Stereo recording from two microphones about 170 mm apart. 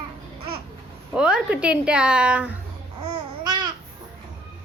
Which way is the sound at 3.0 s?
25° right (ahead or behind).